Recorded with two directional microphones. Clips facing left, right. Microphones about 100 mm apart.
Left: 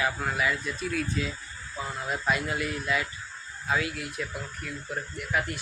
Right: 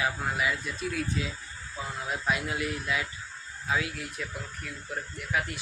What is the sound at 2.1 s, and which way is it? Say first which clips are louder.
Speech: left 2 dB; centre (ahead or behind).